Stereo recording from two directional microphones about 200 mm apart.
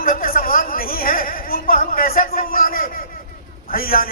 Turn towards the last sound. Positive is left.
turn(degrees=45)  # may be behind; listen again after turning